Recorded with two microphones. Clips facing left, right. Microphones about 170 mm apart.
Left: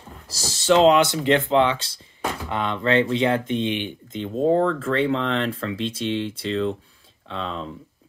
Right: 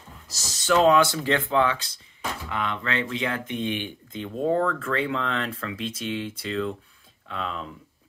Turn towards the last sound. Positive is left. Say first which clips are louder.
# left 3 dB
turn(degrees=30)  # may be behind; listen again after turning